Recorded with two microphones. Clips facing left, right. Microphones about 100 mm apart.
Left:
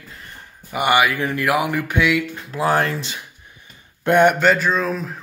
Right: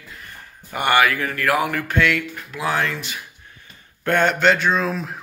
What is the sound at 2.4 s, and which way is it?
Speech, 35° left (ahead or behind).